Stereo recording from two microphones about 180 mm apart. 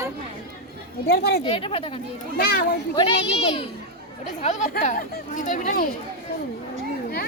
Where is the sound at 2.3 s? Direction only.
60° left (ahead or behind).